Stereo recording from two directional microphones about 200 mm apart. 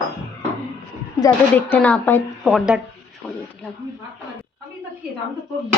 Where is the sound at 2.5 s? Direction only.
Centre (ahead or behind).